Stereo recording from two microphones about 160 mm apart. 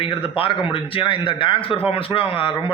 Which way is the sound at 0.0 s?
35° left (ahead or behind).